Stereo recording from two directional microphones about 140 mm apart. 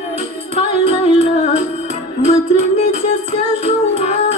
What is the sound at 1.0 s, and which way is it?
Music, 50° left (ahead or behind).